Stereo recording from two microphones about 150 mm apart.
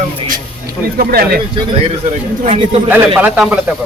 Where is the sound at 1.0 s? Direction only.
90° right.